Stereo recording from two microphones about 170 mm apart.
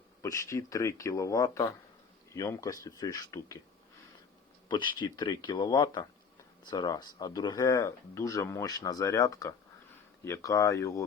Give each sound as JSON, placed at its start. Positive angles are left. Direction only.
{"t": 0.2, "sound": "speech", "side_deg": 15}
{"t": 4.7, "sound": "speech", "side_deg": 25}